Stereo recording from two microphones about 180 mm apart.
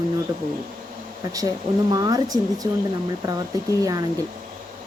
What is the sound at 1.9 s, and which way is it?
Speech, 20° right (ahead or behind).